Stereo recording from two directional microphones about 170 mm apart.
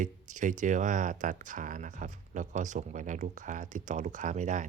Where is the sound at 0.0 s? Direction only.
45° right (ahead or behind).